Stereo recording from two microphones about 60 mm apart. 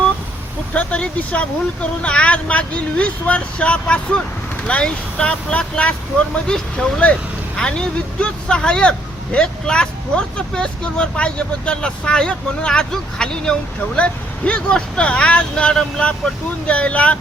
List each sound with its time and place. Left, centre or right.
0.7 s speech: left